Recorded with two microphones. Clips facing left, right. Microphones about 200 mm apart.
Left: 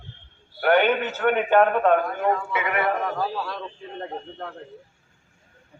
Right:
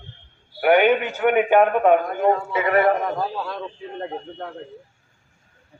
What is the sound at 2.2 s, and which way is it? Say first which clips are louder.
Speech: right 4 dB; 30° right (ahead or behind).